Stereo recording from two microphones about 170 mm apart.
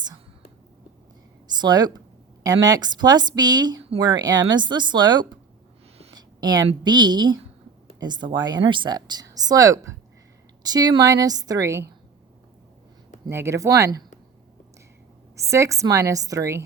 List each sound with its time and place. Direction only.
1.5 s speech: 25° right (ahead or behind)
6.1 s a sound: 25° right (ahead or behind)
6.7 s speech: 25° right (ahead or behind)
13.2 s speech: 15° right (ahead or behind)
15.4 s a woman's voice: 20° right (ahead or behind)